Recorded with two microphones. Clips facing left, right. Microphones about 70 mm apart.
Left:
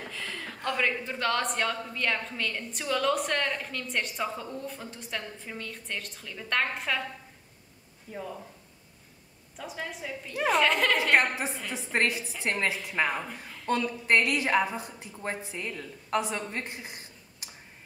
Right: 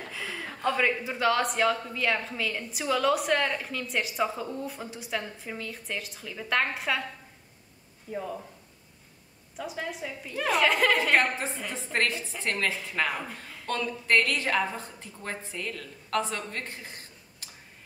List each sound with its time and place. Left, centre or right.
0.1 s speech: centre
8.1 s speech: centre
9.6 s speech: centre
11.1 s a woman's voice: centre